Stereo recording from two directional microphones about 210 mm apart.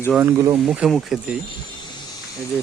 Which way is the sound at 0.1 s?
10° right (ahead or behind).